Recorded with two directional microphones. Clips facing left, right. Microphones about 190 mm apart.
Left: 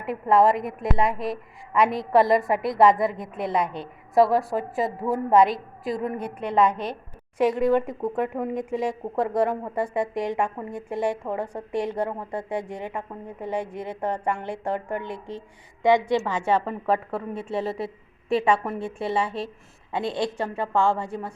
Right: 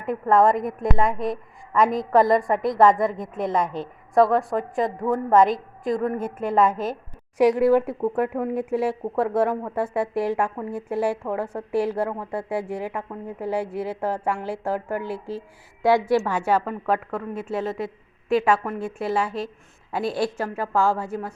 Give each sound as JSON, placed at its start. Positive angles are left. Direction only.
{"t": 0.0, "sound": "a woman's voice", "side_deg": 0}
{"t": 16.3, "sound": "a woman's voice", "side_deg": 25}
{"t": 16.6, "sound": "speech", "side_deg": 0}
{"t": 17.7, "sound": "a woman's voice", "side_deg": 30}
{"t": 18.4, "sound": "speech", "side_deg": 0}
{"t": 18.8, "sound": "a woman's voice", "side_deg": 30}
{"t": 19.0, "sound": "speech", "side_deg": 0}
{"t": 20.0, "sound": "a woman's voice", "side_deg": 25}
{"t": 20.2, "sound": "speech", "side_deg": -5}